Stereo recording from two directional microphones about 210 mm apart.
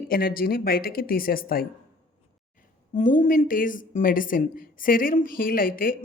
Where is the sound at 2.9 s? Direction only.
35° left (ahead or behind).